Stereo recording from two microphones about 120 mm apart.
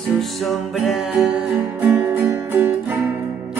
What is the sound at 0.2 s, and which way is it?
Music, centre (ahead or behind).